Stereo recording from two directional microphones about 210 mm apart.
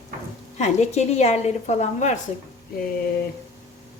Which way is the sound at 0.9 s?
30° left (ahead or behind).